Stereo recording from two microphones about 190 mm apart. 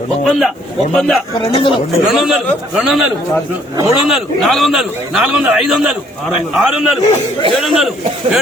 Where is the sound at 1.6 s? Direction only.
25° left (ahead or behind).